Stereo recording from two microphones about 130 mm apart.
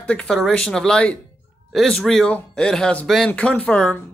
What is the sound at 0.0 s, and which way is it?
Speech, 10° left (ahead or behind).